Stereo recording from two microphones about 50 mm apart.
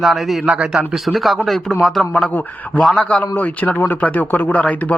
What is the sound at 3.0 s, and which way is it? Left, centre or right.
A man's voice, left.